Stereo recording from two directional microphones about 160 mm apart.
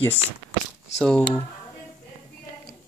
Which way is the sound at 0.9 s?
5° left (ahead or behind).